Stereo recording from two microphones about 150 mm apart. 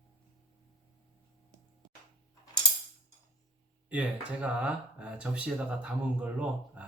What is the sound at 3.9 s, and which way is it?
Speech, 10° right (ahead or behind).